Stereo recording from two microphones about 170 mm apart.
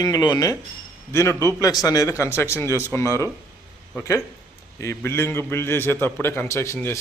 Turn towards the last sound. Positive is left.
turn(degrees=15)  # may be behind; listen again after turning